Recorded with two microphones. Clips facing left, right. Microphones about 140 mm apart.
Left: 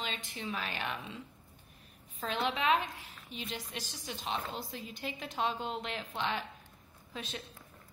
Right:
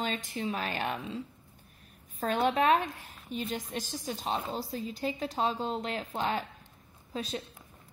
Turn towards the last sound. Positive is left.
turn(degrees=-35)  # may be behind; listen again after turning